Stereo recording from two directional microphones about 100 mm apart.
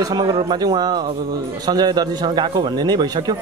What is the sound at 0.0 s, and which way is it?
A man's voice, 40° right (ahead or behind).